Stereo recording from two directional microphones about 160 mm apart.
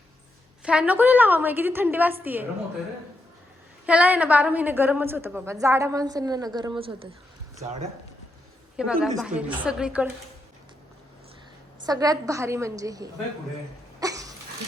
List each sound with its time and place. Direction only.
0.6 s a woman's voice: 5° right (ahead or behind)
3.8 s a woman's voice: 10° right (ahead or behind); by 7.1 s 35° right (ahead or behind)
8.7 s a woman's voice: 5° right (ahead or behind)
11.9 s a woman's voice: 25° right (ahead or behind)
14.0 s a sound: 20° right (ahead or behind)